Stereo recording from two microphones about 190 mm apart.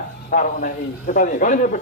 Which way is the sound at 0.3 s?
45° left (ahead or behind).